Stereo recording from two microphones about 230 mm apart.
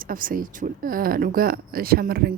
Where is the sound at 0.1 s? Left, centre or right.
Right.